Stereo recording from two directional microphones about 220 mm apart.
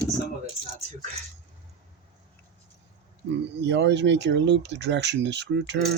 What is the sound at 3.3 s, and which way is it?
Speech, 55° right (ahead or behind).